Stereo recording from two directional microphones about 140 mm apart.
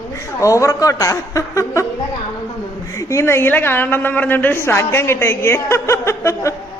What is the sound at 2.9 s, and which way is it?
A woman's voice, 20° left (ahead or behind).